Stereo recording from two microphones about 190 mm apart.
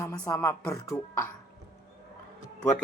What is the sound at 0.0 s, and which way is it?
Speech, 15° left (ahead or behind).